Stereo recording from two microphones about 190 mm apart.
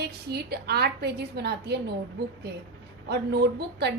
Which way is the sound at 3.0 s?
60° right (ahead or behind).